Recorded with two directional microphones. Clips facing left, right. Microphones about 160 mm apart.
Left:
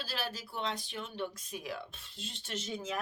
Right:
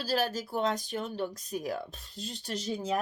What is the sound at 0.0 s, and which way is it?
Speech, 40° right (ahead or behind).